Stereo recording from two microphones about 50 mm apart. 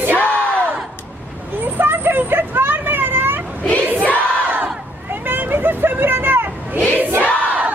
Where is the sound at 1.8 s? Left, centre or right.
Right.